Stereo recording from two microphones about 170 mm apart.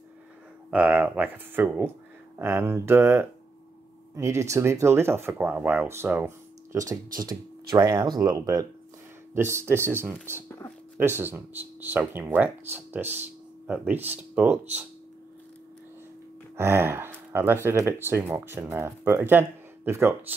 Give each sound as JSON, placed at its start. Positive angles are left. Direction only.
{"t": 0.7, "sound": "speech", "side_deg": -10}
{"t": 16.5, "sound": "speech", "side_deg": -15}